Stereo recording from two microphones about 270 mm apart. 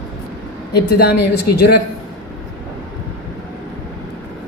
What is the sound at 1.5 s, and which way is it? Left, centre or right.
Speech, left.